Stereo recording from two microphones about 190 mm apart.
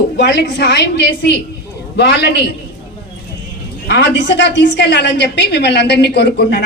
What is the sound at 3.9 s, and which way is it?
A woman's voice, 65° left (ahead or behind).